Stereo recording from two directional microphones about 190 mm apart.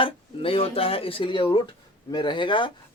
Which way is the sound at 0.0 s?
30° left (ahead or behind).